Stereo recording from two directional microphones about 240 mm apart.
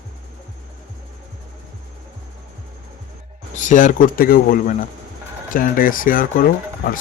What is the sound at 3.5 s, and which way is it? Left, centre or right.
Speech, left.